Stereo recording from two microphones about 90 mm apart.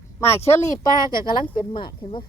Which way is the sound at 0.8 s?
50° left (ahead or behind).